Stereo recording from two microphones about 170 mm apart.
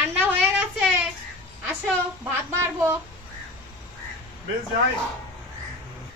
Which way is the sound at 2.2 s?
15° right (ahead or behind).